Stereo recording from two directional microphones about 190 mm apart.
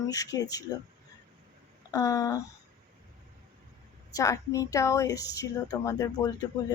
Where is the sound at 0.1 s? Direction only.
20° left (ahead or behind).